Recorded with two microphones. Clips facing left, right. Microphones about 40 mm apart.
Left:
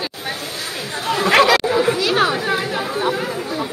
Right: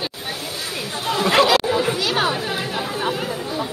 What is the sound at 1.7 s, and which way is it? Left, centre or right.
Chatter, left.